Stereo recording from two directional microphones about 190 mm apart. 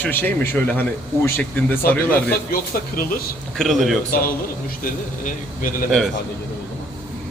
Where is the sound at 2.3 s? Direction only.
50° left (ahead or behind).